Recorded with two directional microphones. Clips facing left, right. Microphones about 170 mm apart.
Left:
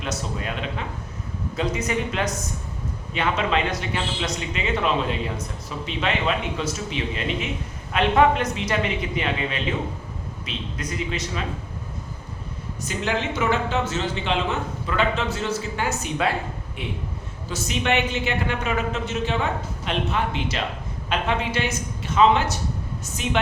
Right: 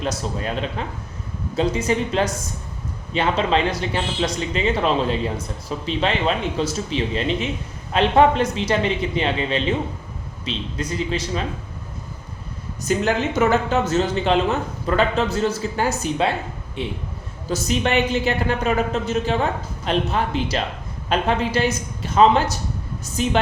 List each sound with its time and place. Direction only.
0.0 s a man's voice: 35° right (ahead or behind)
12.8 s a man's voice: 45° right (ahead or behind)